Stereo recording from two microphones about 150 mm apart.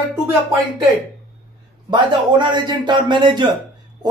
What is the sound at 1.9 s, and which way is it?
A man's voice, 30° right (ahead or behind).